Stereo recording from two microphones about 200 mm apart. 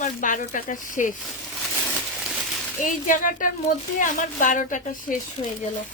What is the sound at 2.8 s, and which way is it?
Speech, 40° left (ahead or behind).